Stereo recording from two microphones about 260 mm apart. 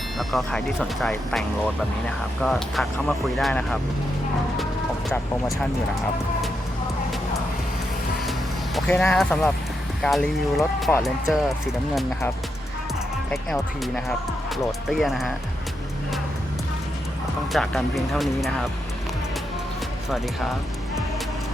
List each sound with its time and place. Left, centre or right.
0.2 s speech: centre
5.0 s speech: centre
8.9 s speech: centre
13.3 s speech: centre
17.5 s speech: centre